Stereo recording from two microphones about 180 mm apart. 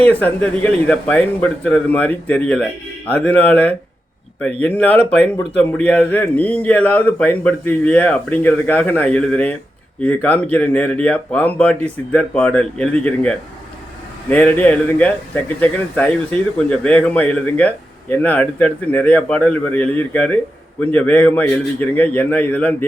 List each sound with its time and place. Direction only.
0.1 s a man's voice: 10° left (ahead or behind)